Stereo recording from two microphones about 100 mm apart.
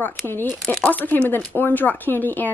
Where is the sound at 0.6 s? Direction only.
10° left (ahead or behind).